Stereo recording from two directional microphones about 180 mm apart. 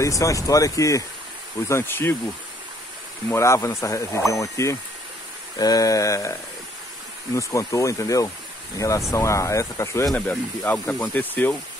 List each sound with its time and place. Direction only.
0.0 s speech: 15° left (ahead or behind)
3.3 s speech: 15° left (ahead or behind)
7.3 s speech: 15° left (ahead or behind)
10.0 s speech: 5° left (ahead or behind)